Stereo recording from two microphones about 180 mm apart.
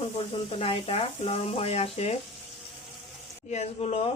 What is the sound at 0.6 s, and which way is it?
Speech, 30° left (ahead or behind).